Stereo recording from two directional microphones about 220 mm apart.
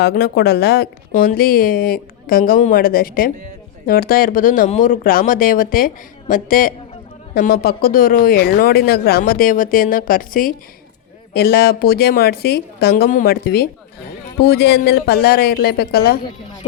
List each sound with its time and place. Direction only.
0.0 s a woman's voice: 45° left (ahead or behind)